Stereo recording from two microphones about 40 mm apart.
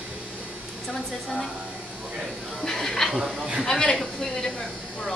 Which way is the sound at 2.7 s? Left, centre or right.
Centre.